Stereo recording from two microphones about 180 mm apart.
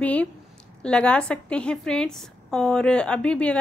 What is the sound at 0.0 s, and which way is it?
A woman's voice, 5° left (ahead or behind).